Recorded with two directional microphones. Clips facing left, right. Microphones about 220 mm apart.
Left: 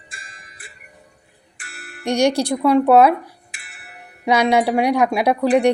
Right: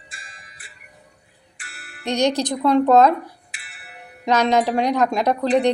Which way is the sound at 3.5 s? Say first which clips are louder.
Left 1 dB; 50° left (ahead or behind).